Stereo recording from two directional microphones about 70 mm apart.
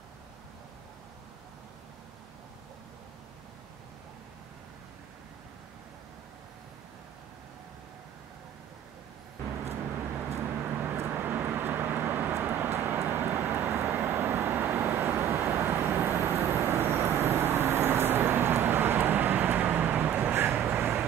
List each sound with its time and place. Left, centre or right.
10.3 s vehicle: right